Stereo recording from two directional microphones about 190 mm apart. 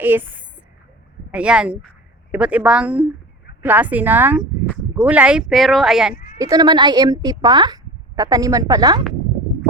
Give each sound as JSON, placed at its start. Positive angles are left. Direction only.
{"t": 0.0, "sound": "a woman's voice", "side_deg": -10}
{"t": 6.4, "sound": "a woman's voice", "side_deg": -20}